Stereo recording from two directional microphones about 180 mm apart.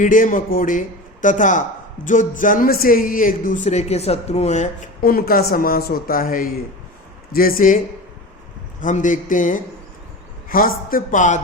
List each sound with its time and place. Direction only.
0.0 s a man's voice: 45° left (ahead or behind)
5.1 s a man's voice: 55° left (ahead or behind)
8.8 s a man's voice: 45° left (ahead or behind)